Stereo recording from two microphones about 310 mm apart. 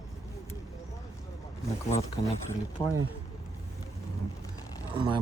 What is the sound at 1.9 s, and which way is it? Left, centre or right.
Speech, centre.